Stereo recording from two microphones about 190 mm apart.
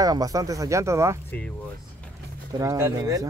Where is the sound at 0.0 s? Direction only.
20° right (ahead or behind).